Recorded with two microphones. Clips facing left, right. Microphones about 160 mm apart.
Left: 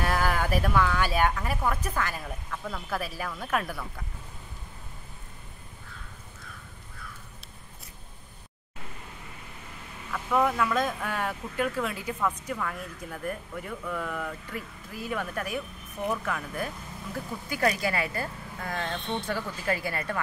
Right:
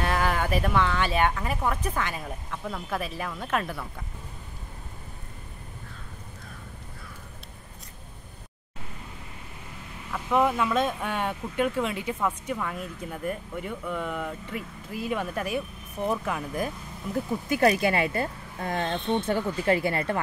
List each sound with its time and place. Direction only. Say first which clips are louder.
0.0 s speech: right 1 dB; 5° left (ahead or behind)
10.1 s speech: right 2 dB; 15° right (ahead or behind)
12.3 s a woman's voice: right 2 dB; 10° right (ahead or behind)
16.1 s speech: right 2 dB; 20° right (ahead or behind)